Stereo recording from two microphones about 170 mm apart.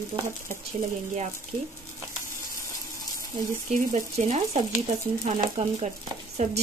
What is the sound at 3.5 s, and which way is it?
Speech, 45° right (ahead or behind).